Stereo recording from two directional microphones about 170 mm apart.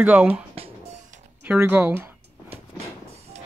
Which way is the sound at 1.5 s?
10° right (ahead or behind).